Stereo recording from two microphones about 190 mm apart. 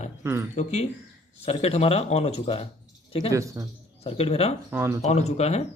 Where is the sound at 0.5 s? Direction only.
35° left (ahead or behind).